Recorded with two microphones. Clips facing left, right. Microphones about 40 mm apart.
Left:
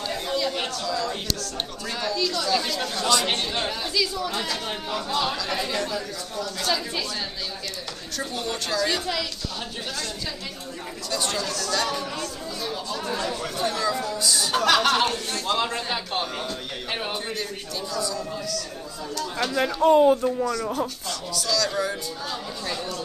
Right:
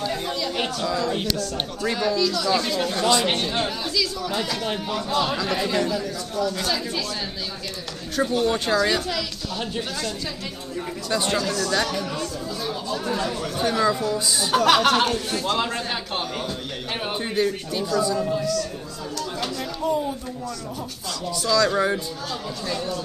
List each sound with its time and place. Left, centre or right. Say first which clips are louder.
0.0 s chatter: right 1 dB; centre
0.5 s speech: right 3 dB; centre
2.0 s speech: right 2 dB; centre
2.7 s speech: right 3 dB; centre
3.3 s speech: right 2 dB; centre
8.3 s speech: right 6 dB; centre
11.1 s speech: right 4 dB; centre
13.6 s speech: right 5 dB; centre
17.0 s speech: right 6 dB; centre
19.6 s speech: left 9 dB; left
21.3 s speech: right 6 dB; centre